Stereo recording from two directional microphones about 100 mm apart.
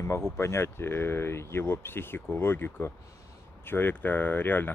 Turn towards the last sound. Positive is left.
turn(degrees=20)  # may be behind; listen again after turning